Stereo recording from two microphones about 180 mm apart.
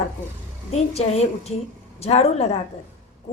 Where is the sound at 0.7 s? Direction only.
35° left (ahead or behind).